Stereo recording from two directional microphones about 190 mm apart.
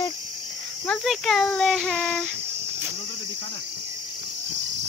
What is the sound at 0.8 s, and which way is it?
Child singing, centre (ahead or behind).